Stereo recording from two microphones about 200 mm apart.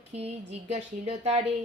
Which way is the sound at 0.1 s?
35° right (ahead or behind).